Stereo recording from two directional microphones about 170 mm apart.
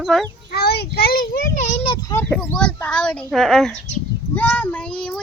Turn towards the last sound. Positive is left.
turn(degrees=5)  # may be behind; listen again after turning